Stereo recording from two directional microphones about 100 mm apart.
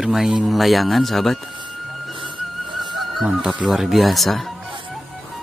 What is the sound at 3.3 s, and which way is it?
Speech, 10° right (ahead or behind).